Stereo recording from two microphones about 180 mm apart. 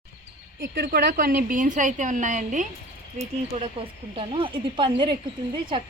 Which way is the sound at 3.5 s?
35° right (ahead or behind).